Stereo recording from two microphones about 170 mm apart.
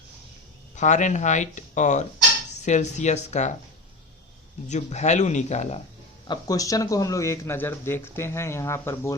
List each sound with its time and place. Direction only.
0.8 s speech: 45° left (ahead or behind)
4.7 s speech: 40° left (ahead or behind)
6.2 s speech: 25° left (ahead or behind)